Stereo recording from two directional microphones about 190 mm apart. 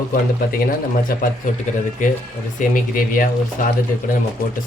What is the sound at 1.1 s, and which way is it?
Speech, 50° left (ahead or behind).